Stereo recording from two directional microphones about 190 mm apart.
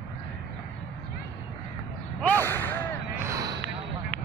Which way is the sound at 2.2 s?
10° left (ahead or behind).